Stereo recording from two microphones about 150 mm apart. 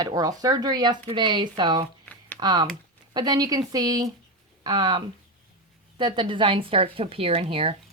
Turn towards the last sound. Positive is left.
turn(degrees=-40)  # may be behind; listen again after turning